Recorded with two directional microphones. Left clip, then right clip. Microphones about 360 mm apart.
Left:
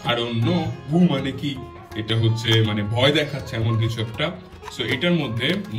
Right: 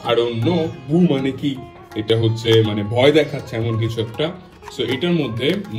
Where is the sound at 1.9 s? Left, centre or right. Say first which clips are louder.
Right 7 dB; centre.